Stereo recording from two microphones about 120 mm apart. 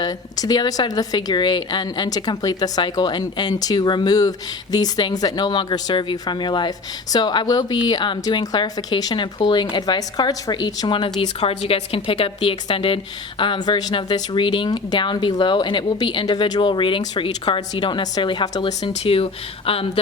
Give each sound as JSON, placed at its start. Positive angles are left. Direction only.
{"t": 0.0, "sound": "speech", "side_deg": 35}
{"t": 11.3, "sound": "a woman's voice", "side_deg": 55}
{"t": 18.8, "sound": "a woman's voice", "side_deg": 50}